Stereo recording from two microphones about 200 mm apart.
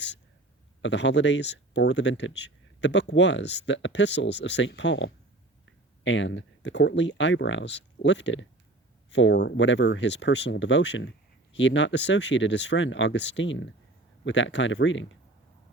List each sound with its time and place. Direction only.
0.8 s speech: 65° left (ahead or behind)